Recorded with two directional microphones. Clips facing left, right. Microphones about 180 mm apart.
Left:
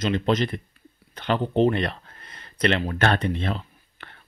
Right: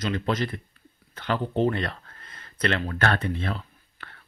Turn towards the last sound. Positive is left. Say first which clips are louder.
# left 1 dB
turn(degrees=20)  # may be behind; listen again after turning